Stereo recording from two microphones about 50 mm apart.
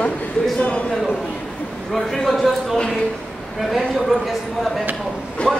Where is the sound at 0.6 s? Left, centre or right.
Left.